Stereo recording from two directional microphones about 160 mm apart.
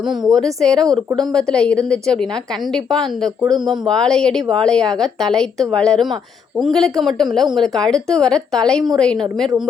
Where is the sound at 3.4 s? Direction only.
25° right (ahead or behind).